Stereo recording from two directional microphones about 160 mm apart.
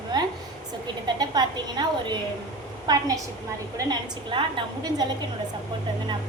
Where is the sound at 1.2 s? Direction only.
25° right (ahead or behind).